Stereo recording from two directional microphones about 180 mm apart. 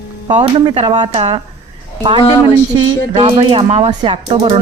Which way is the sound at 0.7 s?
25° right (ahead or behind).